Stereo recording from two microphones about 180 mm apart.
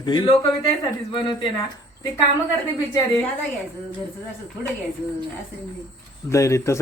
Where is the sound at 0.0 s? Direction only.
25° left (ahead or behind).